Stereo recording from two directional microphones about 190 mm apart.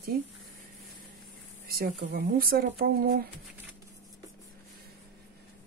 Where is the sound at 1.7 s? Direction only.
50° right (ahead or behind).